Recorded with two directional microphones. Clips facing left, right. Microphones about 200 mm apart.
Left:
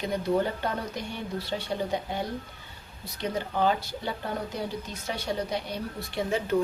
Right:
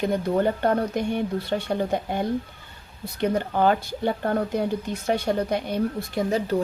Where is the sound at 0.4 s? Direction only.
55° right (ahead or behind).